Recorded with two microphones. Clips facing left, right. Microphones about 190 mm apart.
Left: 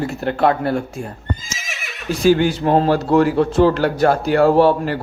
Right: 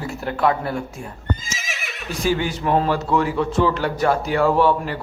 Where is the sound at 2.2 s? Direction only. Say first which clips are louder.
Left 7 dB; 70° left (ahead or behind).